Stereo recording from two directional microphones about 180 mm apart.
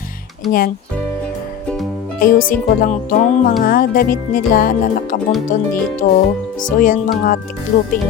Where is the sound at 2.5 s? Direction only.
50° left (ahead or behind).